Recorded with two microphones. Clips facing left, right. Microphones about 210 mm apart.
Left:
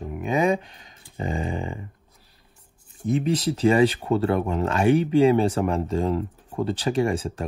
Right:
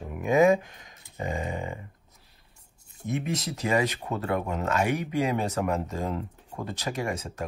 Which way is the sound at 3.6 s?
30° left (ahead or behind).